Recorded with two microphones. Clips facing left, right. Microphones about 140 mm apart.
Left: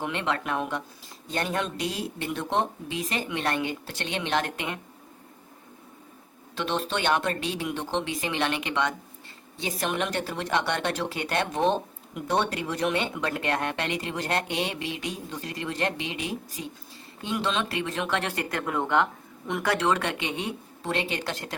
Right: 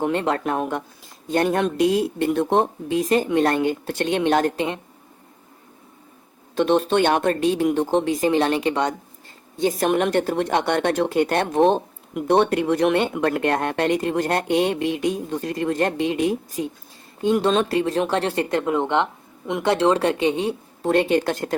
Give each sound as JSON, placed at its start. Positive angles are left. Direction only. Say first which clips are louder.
{"t": 0.0, "sound": "speech", "louder": "right 7 dB", "side_deg": -40}
{"t": 6.6, "sound": "speech", "louder": "right 11 dB", "side_deg": -50}
{"t": 9.6, "sound": "speech", "louder": "right 9 dB", "side_deg": -45}
{"t": 20.8, "sound": "speech", "louder": "right 11 dB", "side_deg": -50}